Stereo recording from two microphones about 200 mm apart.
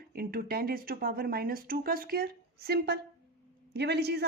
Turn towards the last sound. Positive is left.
turn(degrees=-55)  # may be behind; listen again after turning